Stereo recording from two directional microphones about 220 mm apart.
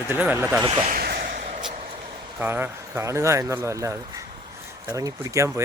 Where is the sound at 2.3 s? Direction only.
10° right (ahead or behind).